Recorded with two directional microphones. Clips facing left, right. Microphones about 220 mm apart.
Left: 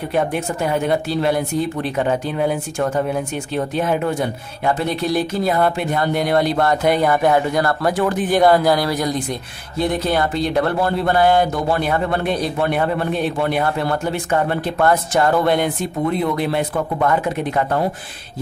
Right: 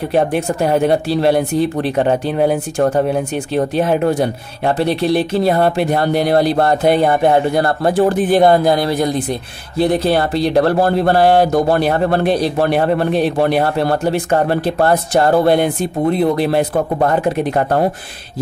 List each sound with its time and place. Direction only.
0.1 s speech: 35° right (ahead or behind)